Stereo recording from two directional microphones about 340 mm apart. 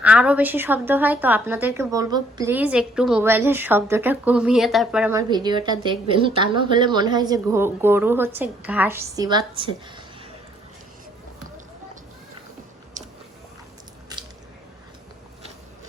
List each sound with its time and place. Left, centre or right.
0.0 s a woman's voice: centre